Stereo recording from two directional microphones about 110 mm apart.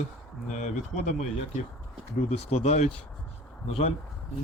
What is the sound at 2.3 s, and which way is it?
Speech, 90° left.